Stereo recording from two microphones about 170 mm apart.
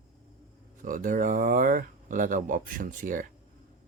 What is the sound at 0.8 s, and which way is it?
Speech, 50° right (ahead or behind).